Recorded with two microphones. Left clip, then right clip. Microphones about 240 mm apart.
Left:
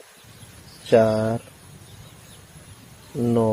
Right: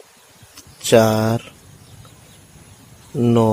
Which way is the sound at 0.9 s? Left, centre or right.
Right.